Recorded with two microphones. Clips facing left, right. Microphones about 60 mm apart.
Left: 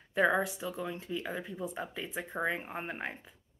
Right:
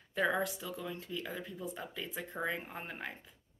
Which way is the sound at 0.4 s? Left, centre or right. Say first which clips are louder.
Left 3 dB; centre.